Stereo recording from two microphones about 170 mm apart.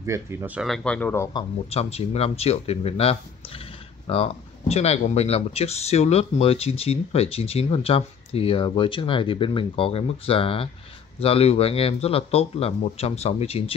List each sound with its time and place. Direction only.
0.0 s speech: 15° right (ahead or behind)
0.7 s speech: 5° left (ahead or behind)
1.3 s speech: 35° left (ahead or behind)